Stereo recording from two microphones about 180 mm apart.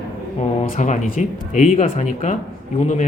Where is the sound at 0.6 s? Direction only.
45° left (ahead or behind).